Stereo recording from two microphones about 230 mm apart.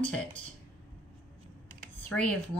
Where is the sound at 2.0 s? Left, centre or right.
Centre.